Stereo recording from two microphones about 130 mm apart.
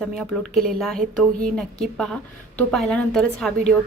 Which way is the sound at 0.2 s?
Centre (ahead or behind).